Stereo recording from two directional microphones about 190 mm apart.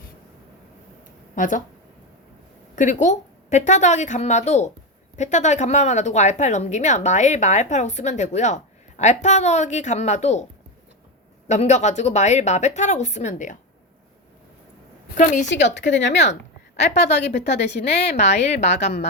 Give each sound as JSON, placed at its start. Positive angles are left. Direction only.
{"t": 1.4, "sound": "speech", "side_deg": 45}
{"t": 2.7, "sound": "a woman's voice", "side_deg": 40}
{"t": 11.4, "sound": "a woman's voice", "side_deg": 35}
{"t": 15.2, "sound": "a woman's voice", "side_deg": 40}
{"t": 15.4, "sound": "speech", "side_deg": 70}
{"t": 17.1, "sound": "a woman's voice", "side_deg": 35}